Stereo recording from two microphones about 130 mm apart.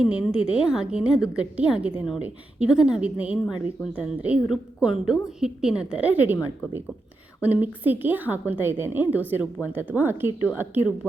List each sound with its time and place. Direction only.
0.0 s a woman's voice: 5° right (ahead or behind)
7.4 s a woman's voice: 15° right (ahead or behind)